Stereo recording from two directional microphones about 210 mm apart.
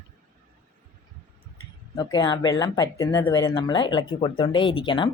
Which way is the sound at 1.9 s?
20° left (ahead or behind).